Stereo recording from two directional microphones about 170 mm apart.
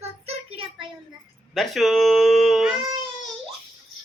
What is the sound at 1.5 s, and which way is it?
Cat, centre (ahead or behind).